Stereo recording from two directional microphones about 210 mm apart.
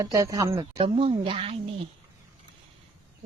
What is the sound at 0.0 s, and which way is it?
A woman's voice, 15° right (ahead or behind).